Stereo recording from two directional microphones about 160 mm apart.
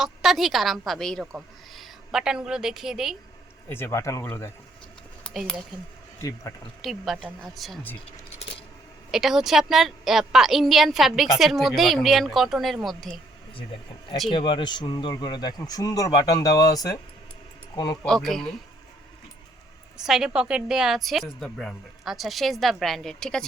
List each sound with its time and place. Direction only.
0.0 s a woman's voice: centre (ahead or behind)
3.7 s speech: 15° left (ahead or behind)
5.2 s speech: centre (ahead or behind)
6.8 s a woman's voice: centre (ahead or behind)
9.1 s a woman's voice: centre (ahead or behind)
14.3 s speech: 30° left (ahead or behind)
18.0 s a woman's voice: 5° left (ahead or behind)
20.0 s a woman's voice: 5° right (ahead or behind)